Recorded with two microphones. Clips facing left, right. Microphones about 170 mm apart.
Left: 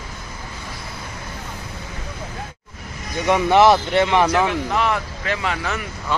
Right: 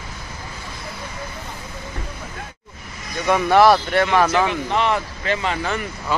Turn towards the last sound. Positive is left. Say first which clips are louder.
# right 1 dB
turn(degrees=0)  # may be behind; listen again after turning